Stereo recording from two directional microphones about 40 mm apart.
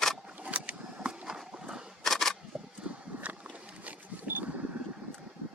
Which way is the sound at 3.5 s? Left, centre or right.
Right.